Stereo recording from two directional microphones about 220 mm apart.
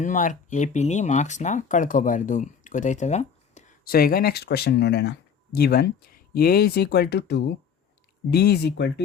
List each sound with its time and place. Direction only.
0.0 s speech: 35° left (ahead or behind)